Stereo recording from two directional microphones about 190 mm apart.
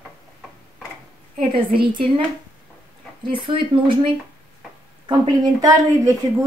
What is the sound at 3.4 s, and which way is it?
Speech, 25° right (ahead or behind).